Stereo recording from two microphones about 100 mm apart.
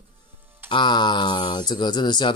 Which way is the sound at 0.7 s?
50° left (ahead or behind).